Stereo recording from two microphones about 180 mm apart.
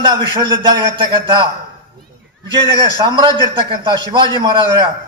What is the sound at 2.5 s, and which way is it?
A man's voice, 30° right (ahead or behind).